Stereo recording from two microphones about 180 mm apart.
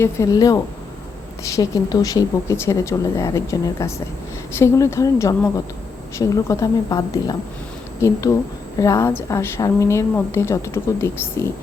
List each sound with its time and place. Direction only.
0.0 s a woman's voice: 20° left (ahead or behind)
8.8 s a woman's voice: 15° left (ahead or behind)